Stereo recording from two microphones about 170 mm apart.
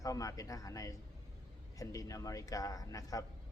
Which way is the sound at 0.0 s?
20° left (ahead or behind).